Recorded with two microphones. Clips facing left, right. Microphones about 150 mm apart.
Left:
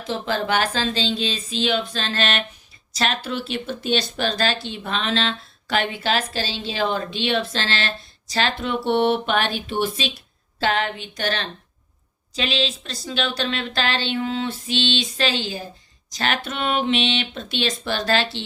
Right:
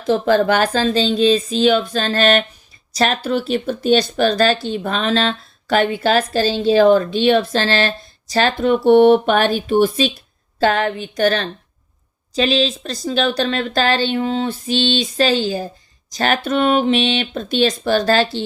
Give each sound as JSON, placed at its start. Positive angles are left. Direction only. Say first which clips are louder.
{"t": 0.1, "sound": "speech", "louder": "right 9 dB", "side_deg": -50}